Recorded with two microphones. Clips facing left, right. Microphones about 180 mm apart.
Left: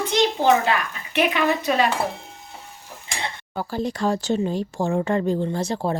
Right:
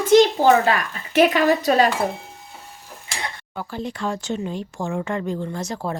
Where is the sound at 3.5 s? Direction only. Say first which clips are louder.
Left 5 dB; 35° left (ahead or behind).